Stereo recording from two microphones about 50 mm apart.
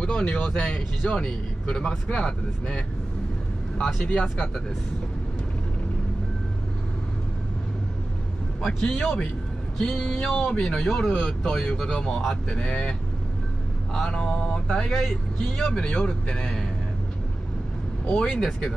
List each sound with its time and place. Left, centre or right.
0.0 s speech: left
3.8 s speech: centre
8.5 s speech: centre
12.5 s speech: left
13.9 s speech: centre
18.1 s speech: centre